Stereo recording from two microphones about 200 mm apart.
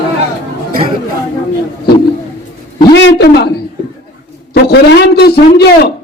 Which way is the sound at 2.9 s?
60° left (ahead or behind).